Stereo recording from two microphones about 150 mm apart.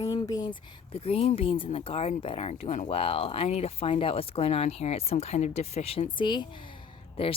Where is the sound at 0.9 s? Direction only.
40° left (ahead or behind).